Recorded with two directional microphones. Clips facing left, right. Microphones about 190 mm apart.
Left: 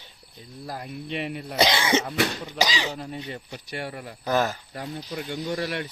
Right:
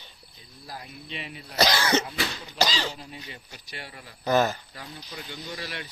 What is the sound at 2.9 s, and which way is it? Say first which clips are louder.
Speech: left 8 dB; 50° left (ahead or behind).